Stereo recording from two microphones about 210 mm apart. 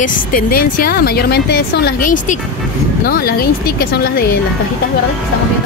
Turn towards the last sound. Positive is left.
turn(degrees=45)  # may be behind; listen again after turning